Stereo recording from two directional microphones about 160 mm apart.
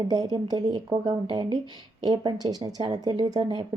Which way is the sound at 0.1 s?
25° right (ahead or behind).